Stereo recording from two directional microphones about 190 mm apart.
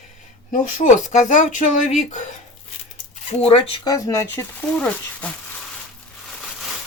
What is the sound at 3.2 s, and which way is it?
Speech, 30° left (ahead or behind).